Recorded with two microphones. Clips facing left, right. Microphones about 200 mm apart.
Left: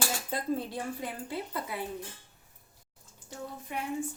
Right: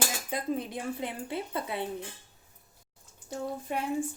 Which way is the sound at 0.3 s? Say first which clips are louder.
Even; 15° right (ahead or behind).